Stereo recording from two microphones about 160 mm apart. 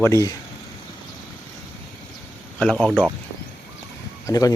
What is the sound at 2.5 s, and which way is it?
Speech, 5° left (ahead or behind).